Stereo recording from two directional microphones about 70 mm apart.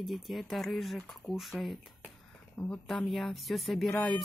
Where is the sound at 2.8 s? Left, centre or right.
Centre.